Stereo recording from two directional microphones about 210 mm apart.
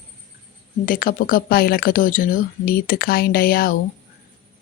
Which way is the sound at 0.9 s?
40° left (ahead or behind).